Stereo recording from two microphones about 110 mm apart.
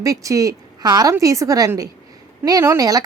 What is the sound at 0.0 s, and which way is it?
A woman's voice, 30° right (ahead or behind).